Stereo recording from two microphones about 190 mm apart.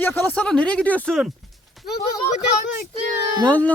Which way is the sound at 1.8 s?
55° left (ahead or behind).